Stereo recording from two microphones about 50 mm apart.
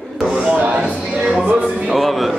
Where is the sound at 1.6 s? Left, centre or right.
Centre.